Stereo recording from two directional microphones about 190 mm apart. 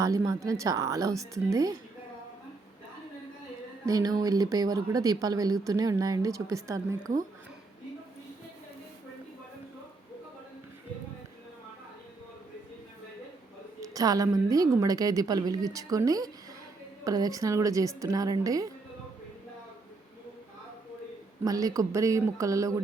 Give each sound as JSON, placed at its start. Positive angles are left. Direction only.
{"t": 0.0, "sound": "a woman's voice", "side_deg": -15}
{"t": 3.8, "sound": "speech", "side_deg": -20}
{"t": 13.8, "sound": "speech", "side_deg": -20}
{"t": 21.4, "sound": "a woman's voice", "side_deg": -20}